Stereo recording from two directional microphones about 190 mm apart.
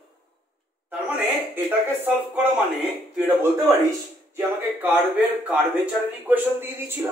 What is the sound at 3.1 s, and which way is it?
A man's voice, 10° right (ahead or behind).